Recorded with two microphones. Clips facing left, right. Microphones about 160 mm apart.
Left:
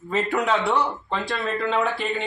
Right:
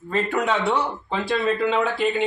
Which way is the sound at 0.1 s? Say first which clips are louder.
Even; 5° left (ahead or behind).